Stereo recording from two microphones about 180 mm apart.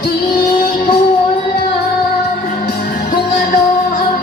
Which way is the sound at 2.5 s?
50° left (ahead or behind).